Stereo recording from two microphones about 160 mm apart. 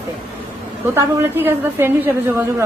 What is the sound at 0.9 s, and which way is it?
A woman's voice, 15° right (ahead or behind).